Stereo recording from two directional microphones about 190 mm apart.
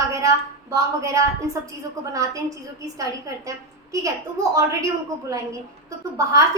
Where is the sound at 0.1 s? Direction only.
15° right (ahead or behind).